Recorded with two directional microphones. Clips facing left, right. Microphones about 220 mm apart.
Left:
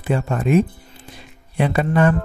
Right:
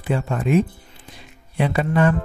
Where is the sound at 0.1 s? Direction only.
45° left (ahead or behind).